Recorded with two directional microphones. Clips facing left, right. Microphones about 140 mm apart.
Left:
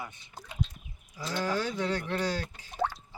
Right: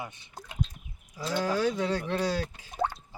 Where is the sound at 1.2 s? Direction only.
5° right (ahead or behind).